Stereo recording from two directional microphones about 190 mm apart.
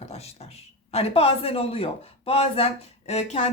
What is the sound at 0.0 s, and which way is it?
Speech, 35° left (ahead or behind).